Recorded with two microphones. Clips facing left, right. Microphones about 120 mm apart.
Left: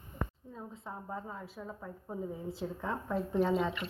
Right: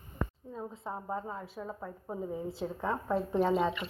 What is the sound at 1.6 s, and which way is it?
Speech, 25° right (ahead or behind).